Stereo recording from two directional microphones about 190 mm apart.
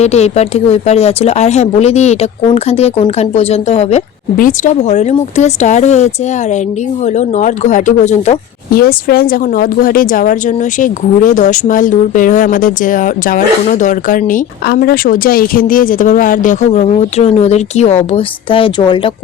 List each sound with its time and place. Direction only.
0.0 s speech: 35° left (ahead or behind)
4.4 s speech: 45° left (ahead or behind)
8.7 s speech: 50° left (ahead or behind); by 19.1 s 25° left (ahead or behind)